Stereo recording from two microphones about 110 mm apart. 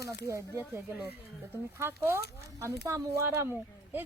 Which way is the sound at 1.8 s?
20° right (ahead or behind).